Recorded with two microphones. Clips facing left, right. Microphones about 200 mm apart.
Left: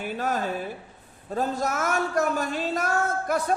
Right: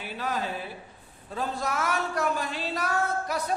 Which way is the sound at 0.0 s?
50° left (ahead or behind).